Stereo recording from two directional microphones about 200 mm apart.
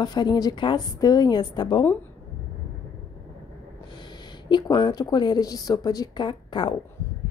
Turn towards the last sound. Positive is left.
turn(degrees=25)  # may be behind; listen again after turning